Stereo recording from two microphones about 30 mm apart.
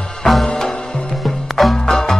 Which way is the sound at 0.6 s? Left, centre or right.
Left.